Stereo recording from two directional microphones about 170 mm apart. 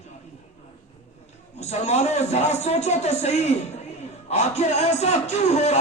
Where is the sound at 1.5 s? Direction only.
40° left (ahead or behind).